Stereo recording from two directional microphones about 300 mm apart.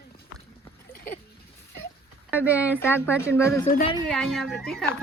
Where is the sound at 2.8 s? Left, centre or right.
Centre.